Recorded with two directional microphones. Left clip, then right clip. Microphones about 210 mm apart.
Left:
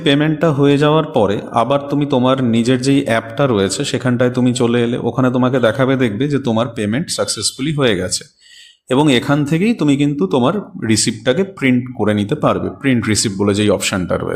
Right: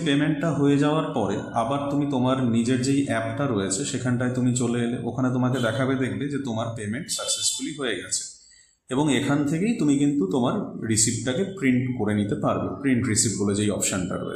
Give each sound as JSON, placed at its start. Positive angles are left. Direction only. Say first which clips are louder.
{"t": 0.0, "sound": "a man's voice", "louder": "left 10 dB", "side_deg": 45}